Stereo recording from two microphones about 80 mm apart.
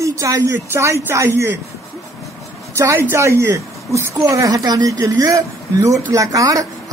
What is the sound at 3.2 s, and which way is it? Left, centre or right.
Speech, right.